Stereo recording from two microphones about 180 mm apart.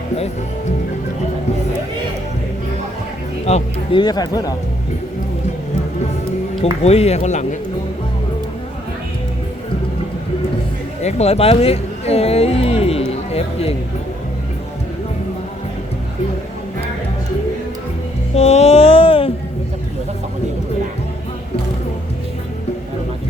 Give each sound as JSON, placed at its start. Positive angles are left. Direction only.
{"t": 3.4, "sound": "speech", "side_deg": 35}
{"t": 4.0, "sound": "speech", "side_deg": 20}
{"t": 6.6, "sound": "speech", "side_deg": 35}
{"t": 11.0, "sound": "speech", "side_deg": 35}
{"t": 18.3, "sound": "a sound", "side_deg": 35}